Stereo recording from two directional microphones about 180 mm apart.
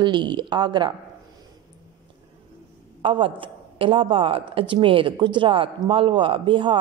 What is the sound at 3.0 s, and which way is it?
A woman's voice, 30° right (ahead or behind).